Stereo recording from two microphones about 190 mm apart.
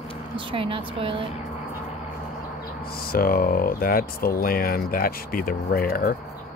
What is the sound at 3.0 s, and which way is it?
Speech, 50° left (ahead or behind).